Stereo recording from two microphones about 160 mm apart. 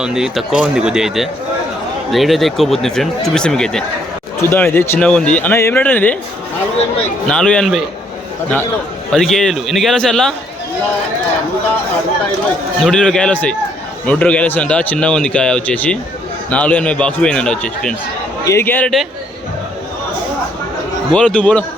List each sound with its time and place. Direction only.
0.0 s speech: 5° right (ahead or behind)
4.4 s speech: 15° left (ahead or behind)
7.3 s speech: 5° left (ahead or behind)
9.1 s speech: centre (ahead or behind)
12.8 s speech: 5° left (ahead or behind)
21.1 s speech: 5° left (ahead or behind)